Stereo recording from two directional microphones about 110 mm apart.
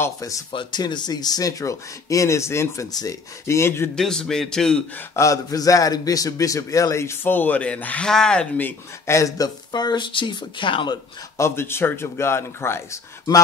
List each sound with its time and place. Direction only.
0.5 s a man's voice: 45° left (ahead or behind); by 3.9 s 25° left (ahead or behind)
3.9 s a man's voice: 5° left (ahead or behind)
5.1 s a man's voice: 30° left (ahead or behind); by 11.0 s 50° left (ahead or behind)
11.3 s a man's voice: 25° left (ahead or behind)